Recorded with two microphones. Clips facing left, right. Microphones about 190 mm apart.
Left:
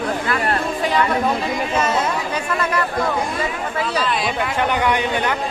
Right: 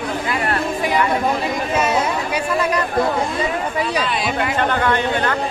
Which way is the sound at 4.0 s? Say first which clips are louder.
Even; centre (ahead or behind).